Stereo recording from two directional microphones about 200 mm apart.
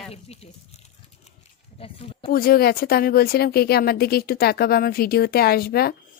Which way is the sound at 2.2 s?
50° left (ahead or behind).